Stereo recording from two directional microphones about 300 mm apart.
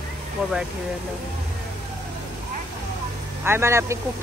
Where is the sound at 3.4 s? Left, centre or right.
Centre.